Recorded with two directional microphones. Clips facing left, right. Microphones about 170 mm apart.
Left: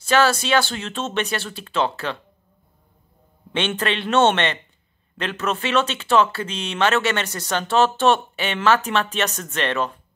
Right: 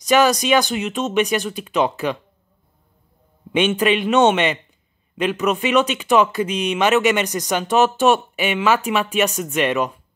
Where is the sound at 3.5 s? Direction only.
10° right (ahead or behind).